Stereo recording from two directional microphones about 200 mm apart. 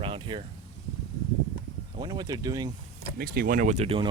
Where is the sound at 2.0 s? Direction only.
20° right (ahead or behind).